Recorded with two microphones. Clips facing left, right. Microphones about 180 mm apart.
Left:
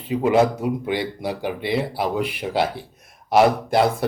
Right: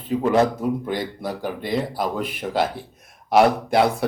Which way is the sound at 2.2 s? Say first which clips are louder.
Left 3 dB; 50° right (ahead or behind).